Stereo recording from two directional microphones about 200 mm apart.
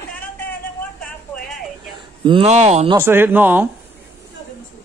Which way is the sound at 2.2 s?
25° right (ahead or behind).